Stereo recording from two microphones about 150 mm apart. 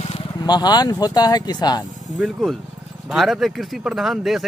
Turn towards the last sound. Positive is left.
turn(degrees=0)  # may be behind; listen again after turning